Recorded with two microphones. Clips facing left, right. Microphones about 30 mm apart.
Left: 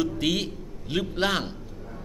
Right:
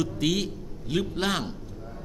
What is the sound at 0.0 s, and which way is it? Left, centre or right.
A man's voice, centre.